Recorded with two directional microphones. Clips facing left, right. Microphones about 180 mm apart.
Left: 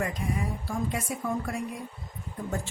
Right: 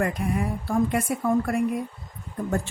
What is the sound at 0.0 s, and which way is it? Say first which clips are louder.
A woman's voice: right 5 dB; 60° right (ahead or behind).